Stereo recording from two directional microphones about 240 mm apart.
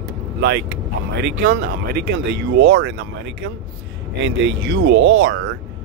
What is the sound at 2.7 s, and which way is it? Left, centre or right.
Speech, right.